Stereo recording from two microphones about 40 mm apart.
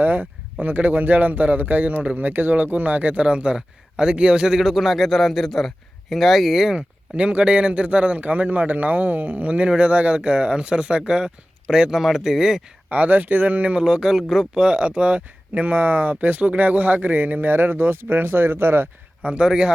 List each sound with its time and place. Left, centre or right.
0.0 s a man's voice: right; by 4.6 s centre
4.6 s a man's voice: centre
7.2 s a man's voice: right; by 12.6 s centre
12.9 s a man's voice: right
13.8 s speech: centre
14.2 s a man's voice: centre
14.5 s a man's voice: right
17.5 s speech: right
19.2 s speech: right